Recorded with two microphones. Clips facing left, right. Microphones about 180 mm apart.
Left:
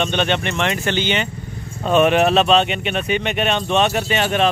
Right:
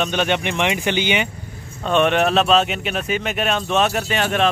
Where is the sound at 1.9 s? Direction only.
5° left (ahead or behind).